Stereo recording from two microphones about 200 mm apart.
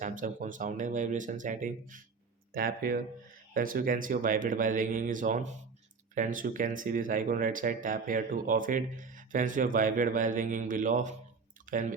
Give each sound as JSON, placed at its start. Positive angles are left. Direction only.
{"t": 0.0, "sound": "speech", "side_deg": -40}